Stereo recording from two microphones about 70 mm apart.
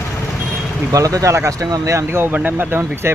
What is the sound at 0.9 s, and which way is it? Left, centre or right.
Speech, right.